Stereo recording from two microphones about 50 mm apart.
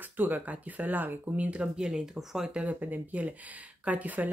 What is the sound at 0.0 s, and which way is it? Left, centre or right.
Speech, right.